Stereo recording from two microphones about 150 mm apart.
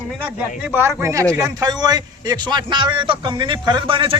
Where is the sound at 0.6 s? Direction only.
15° right (ahead or behind).